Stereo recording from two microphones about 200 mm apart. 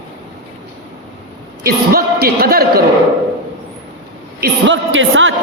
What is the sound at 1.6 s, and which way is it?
A man's voice, 50° right (ahead or behind).